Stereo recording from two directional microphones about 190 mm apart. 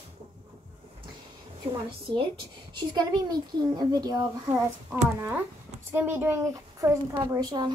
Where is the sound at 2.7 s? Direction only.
25° right (ahead or behind).